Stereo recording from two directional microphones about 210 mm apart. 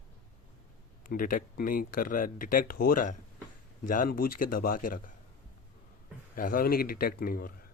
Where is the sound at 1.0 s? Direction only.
40° left (ahead or behind).